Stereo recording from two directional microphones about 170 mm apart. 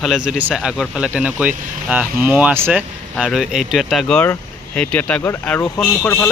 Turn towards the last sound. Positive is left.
turn(degrees=15)  # may be behind; listen again after turning